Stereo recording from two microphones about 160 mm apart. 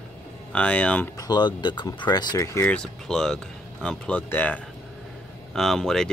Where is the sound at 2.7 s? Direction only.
5° left (ahead or behind).